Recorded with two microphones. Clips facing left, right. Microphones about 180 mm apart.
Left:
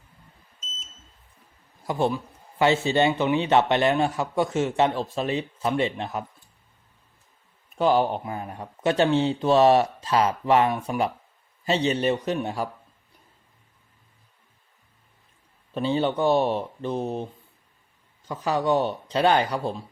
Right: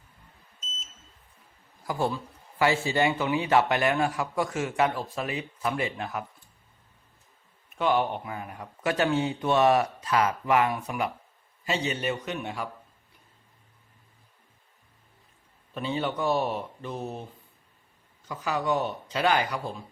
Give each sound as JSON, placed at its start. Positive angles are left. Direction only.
{"t": 1.9, "sound": "a man's voice", "side_deg": 20}
{"t": 7.8, "sound": "a man's voice", "side_deg": 35}
{"t": 15.7, "sound": "a man's voice", "side_deg": 30}
{"t": 18.3, "sound": "speech", "side_deg": 30}